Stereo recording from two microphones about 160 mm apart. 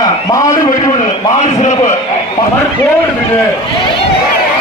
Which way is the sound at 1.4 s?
45° left (ahead or behind).